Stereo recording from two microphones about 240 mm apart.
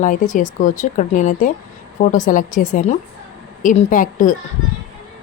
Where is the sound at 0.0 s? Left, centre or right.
Left.